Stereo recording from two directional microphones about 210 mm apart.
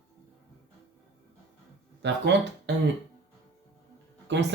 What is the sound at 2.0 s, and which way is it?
Speech, 55° right (ahead or behind).